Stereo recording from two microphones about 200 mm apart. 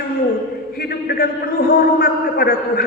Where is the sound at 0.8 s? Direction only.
50° left (ahead or behind).